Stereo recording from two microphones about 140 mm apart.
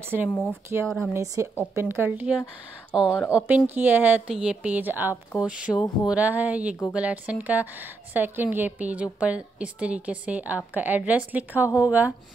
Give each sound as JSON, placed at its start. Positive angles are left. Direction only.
{"t": 0.3, "sound": "a woman's voice", "side_deg": 5}
{"t": 1.1, "sound": "a woman's voice", "side_deg": -20}